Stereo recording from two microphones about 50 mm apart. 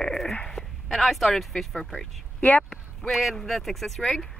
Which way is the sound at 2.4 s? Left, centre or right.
Left.